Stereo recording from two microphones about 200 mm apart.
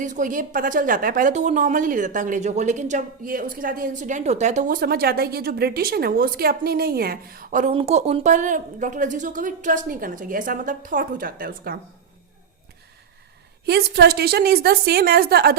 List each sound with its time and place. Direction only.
0.0 s a woman's voice: 40° right (ahead or behind)
7.7 s a woman's voice: 30° right (ahead or behind); by 11.8 s 45° right (ahead or behind)
13.7 s a woman's voice: 55° right (ahead or behind)